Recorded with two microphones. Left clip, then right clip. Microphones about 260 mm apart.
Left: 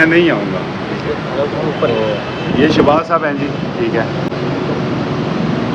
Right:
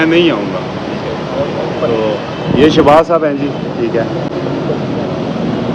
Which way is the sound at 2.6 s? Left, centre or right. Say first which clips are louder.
Right 3 dB; right.